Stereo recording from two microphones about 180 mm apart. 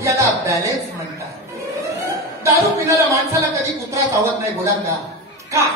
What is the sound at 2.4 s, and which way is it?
Speech, 15° right (ahead or behind).